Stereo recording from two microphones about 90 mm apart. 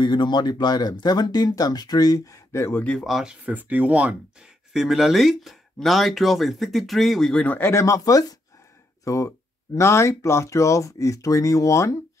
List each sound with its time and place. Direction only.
0.0 s speech: 55° left (ahead or behind); by 2.8 s 30° left (ahead or behind)
3.0 s speech: 5° right (ahead or behind)
3.4 s speech: 15° right (ahead or behind)
4.7 s speech: 5° right (ahead or behind)
7.4 s speech: 25° left (ahead or behind)
7.8 s speech: 40° left (ahead or behind)